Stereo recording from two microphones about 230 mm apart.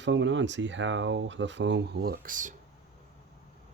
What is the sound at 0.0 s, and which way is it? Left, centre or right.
Speech, right.